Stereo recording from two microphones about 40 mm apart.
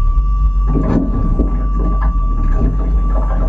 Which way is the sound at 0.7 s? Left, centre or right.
Centre.